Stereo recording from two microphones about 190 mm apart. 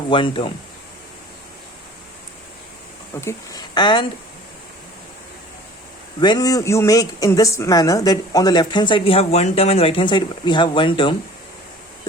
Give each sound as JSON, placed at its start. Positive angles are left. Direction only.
{"t": 0.1, "sound": "speech", "side_deg": 25}
{"t": 3.2, "sound": "speech", "side_deg": 15}
{"t": 6.1, "sound": "speech", "side_deg": 25}